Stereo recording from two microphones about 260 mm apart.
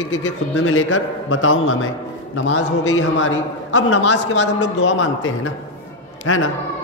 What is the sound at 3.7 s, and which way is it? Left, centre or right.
Speech, left.